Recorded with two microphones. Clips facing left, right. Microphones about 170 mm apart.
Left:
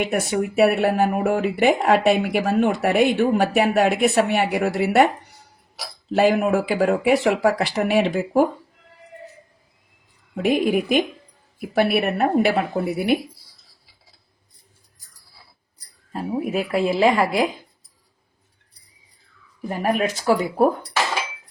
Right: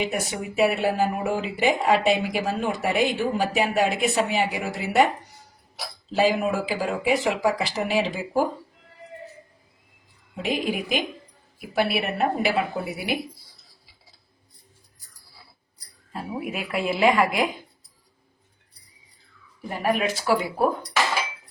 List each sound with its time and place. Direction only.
0.0 s speech: 60° left (ahead or behind)
6.1 s speech: 60° left (ahead or behind)
10.3 s speech: 55° left (ahead or behind)
16.1 s a woman's voice: 40° left (ahead or behind)
19.6 s speech: 45° left (ahead or behind)